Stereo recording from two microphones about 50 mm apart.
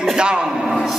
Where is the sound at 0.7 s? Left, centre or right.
Centre.